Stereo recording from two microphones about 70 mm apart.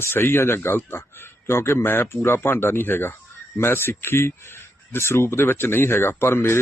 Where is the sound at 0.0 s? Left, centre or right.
Left.